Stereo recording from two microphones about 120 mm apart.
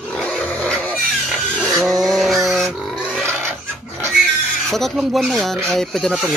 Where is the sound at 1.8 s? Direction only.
Centre (ahead or behind).